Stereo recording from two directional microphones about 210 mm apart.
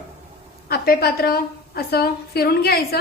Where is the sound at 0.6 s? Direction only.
45° left (ahead or behind).